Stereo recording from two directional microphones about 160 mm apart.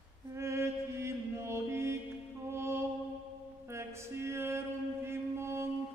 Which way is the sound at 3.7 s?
15° right (ahead or behind).